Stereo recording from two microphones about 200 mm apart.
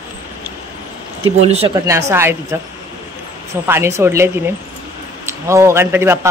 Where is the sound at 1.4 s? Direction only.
30° right (ahead or behind).